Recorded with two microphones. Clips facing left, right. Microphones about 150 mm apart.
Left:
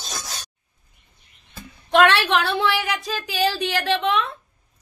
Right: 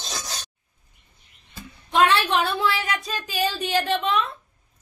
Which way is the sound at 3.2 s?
90° left.